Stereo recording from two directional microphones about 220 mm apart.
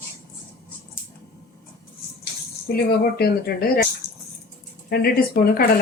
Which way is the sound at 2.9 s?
45° left (ahead or behind).